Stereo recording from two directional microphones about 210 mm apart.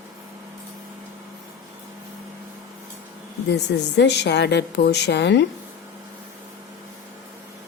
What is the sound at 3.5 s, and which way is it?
A woman's voice, 55° left (ahead or behind).